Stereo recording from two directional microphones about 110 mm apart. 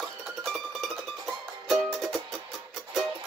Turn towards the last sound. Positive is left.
turn(degrees=0)  # may be behind; listen again after turning